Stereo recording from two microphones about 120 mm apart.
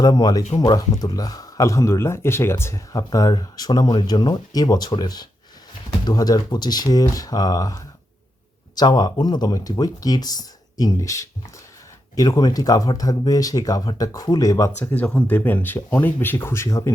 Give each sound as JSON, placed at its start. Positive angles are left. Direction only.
{"t": 0.0, "sound": "speech", "side_deg": 35}
{"t": 14.8, "sound": "speech", "side_deg": 15}